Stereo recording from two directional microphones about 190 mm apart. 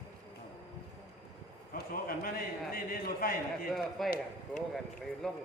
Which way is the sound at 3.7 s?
Centre (ahead or behind).